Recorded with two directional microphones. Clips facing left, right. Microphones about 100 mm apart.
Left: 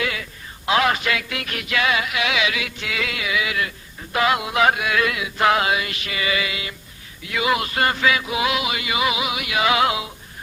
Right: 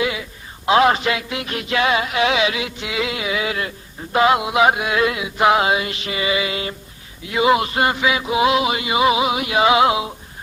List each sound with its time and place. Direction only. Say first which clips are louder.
0.0 s speech: right 4 dB; 20° right (ahead or behind)